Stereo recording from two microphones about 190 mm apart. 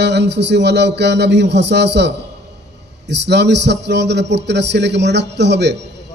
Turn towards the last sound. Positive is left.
turn(degrees=-65)  # may be behind; listen again after turning